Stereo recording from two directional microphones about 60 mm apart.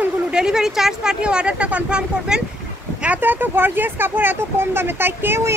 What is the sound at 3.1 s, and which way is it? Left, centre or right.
Speech, right.